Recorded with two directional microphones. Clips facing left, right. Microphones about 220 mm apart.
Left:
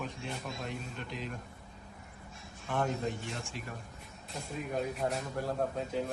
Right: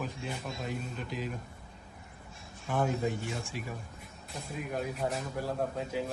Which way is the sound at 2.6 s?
5° right (ahead or behind).